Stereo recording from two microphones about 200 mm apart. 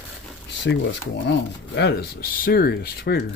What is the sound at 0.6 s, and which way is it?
Speech, 65° left (ahead or behind).